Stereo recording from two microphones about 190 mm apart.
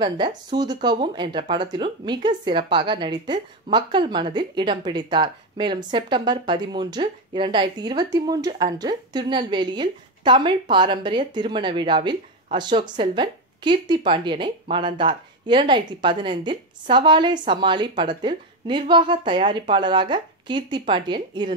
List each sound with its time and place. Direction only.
0.0 s speech: 25° right (ahead or behind)